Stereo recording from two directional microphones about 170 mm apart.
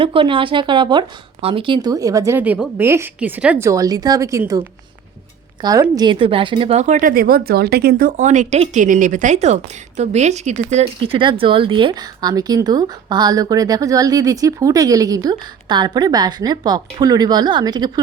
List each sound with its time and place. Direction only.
0.0 s speech: 30° right (ahead or behind); by 3.7 s 10° right (ahead or behind)
3.7 s speech: 20° right (ahead or behind)
5.6 s speech: 20° right (ahead or behind)
6.8 s speech: 50° right (ahead or behind); by 18.0 s 25° right (ahead or behind)